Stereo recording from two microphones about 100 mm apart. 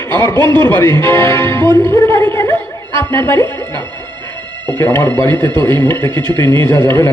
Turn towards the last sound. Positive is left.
turn(degrees=25)  # may be behind; listen again after turning